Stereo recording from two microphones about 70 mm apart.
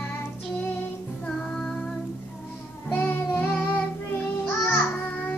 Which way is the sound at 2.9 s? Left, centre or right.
Left.